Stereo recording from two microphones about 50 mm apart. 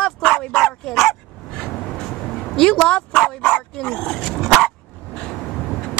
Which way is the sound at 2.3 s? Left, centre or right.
Centre.